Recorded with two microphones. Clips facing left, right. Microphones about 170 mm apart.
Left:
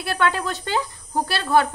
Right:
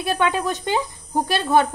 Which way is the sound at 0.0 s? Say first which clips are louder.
Right 2 dB; 15° right (ahead or behind).